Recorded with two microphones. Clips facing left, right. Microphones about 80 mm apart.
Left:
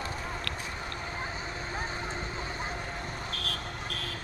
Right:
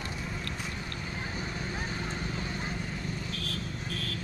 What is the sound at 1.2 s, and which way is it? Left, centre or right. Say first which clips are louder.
Clip-clop: even; left.